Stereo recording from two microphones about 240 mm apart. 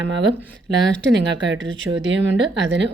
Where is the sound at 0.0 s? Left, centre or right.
Right.